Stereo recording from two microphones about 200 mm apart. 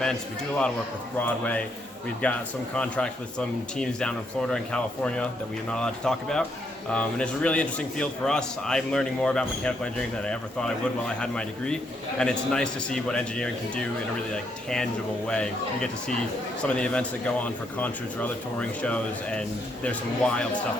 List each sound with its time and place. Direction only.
0.0 s a man's voice: 5° left (ahead or behind)
2.2 s a man's voice: 5° left (ahead or behind)
15.3 s a man's voice: 5° left (ahead or behind)